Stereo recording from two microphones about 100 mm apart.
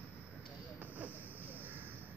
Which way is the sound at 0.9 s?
15° right (ahead or behind).